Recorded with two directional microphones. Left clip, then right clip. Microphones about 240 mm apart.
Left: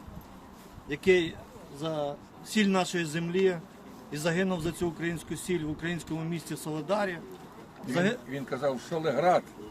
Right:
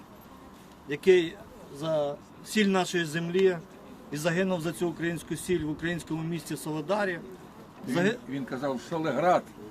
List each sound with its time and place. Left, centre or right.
0.9 s speech: centre
8.3 s speech: centre